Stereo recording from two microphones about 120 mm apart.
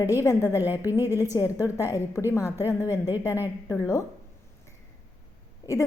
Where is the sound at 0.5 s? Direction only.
15° right (ahead or behind).